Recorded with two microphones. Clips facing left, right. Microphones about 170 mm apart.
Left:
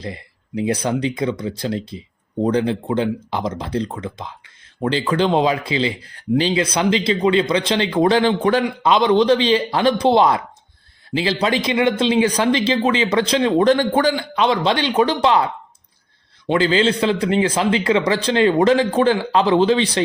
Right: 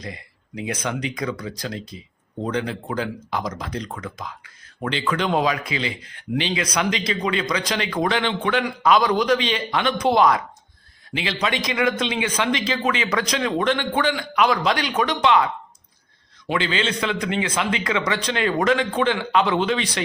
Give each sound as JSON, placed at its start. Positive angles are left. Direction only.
{"t": 0.0, "sound": "a man's voice", "side_deg": 30}
{"t": 8.6, "sound": "a man's voice", "side_deg": 25}
{"t": 16.5, "sound": "a man's voice", "side_deg": 35}